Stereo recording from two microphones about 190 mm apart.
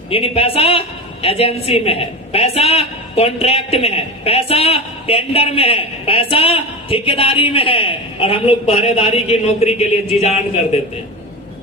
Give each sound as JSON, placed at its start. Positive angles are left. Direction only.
{"t": 0.1, "sound": "a woman's voice", "side_deg": 30}